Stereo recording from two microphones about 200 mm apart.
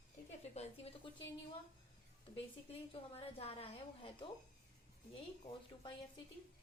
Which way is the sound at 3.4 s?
30° left (ahead or behind).